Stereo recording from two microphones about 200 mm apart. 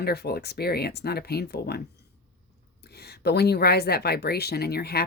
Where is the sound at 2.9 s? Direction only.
55° left (ahead or behind).